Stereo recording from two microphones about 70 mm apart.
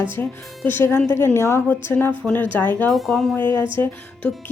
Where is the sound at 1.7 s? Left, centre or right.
Left.